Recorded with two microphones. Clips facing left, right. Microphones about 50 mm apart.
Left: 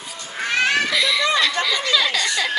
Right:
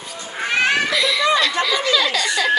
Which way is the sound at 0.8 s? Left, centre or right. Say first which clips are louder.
Right 2 dB; centre.